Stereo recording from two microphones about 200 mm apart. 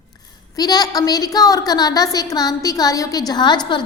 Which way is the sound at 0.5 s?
20° left (ahead or behind).